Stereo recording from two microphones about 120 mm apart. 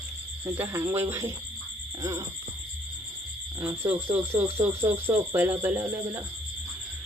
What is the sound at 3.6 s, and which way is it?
Speech, 15° right (ahead or behind).